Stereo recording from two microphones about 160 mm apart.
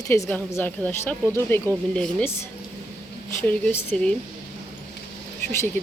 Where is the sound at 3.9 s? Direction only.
5° left (ahead or behind).